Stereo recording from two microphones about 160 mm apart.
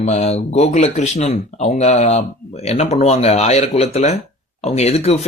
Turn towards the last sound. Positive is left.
turn(degrees=40)  # may be behind; listen again after turning